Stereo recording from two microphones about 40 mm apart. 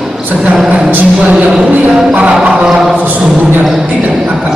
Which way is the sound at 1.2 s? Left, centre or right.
Right.